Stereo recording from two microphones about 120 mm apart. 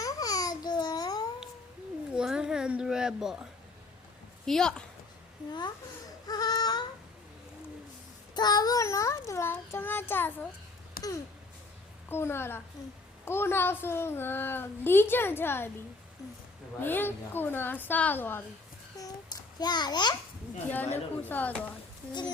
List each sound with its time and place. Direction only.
0.0 s babbling: 30° left (ahead or behind)
2.1 s speech: 5° right (ahead or behind)
4.4 s a woman's voice: 5° left (ahead or behind)
5.5 s a child's voice: 40° left (ahead or behind)
6.2 s baby cry: 35° left (ahead or behind)
8.4 s a woman's voice: 35° left (ahead or behind); by 10.5 s 15° left (ahead or behind)
12.0 s a woman's voice: 20° left (ahead or behind)
16.8 s a woman's voice: 15° left (ahead or behind)
19.5 s a child's voice: 35° left (ahead or behind)
20.7 s a woman's voice: 15° left (ahead or behind)